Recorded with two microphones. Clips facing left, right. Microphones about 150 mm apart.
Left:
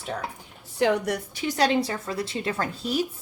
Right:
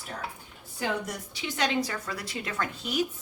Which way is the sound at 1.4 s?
35° left (ahead or behind).